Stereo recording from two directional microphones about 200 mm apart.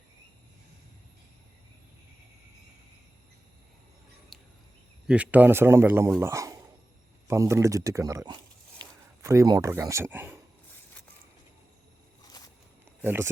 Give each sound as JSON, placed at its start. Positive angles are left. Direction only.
{"t": 5.0, "sound": "a man's voice", "side_deg": -5}
{"t": 13.0, "sound": "a man's voice", "side_deg": -10}